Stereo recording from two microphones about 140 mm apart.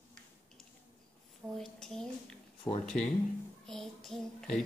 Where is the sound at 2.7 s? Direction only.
35° left (ahead or behind).